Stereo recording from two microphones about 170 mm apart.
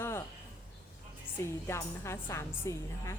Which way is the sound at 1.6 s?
15° left (ahead or behind).